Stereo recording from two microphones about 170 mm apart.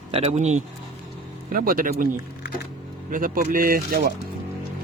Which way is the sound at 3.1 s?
55° right (ahead or behind).